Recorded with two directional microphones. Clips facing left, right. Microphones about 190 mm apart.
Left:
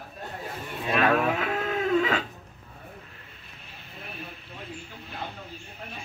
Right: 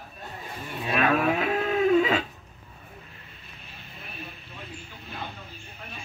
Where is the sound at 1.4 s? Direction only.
15° right (ahead or behind).